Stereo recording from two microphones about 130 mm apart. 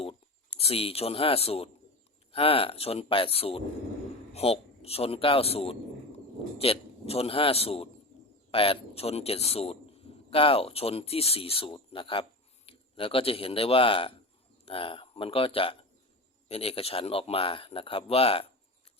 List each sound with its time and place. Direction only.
0.0 s a man's voice: 50° left (ahead or behind)